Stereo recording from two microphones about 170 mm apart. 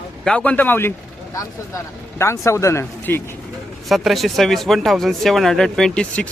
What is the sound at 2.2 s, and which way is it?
Speech, 15° left (ahead or behind).